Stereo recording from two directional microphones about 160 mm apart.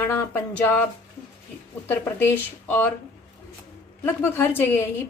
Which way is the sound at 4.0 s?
15° left (ahead or behind).